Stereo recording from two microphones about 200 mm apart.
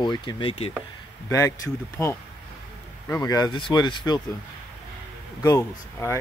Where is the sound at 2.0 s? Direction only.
10° left (ahead or behind).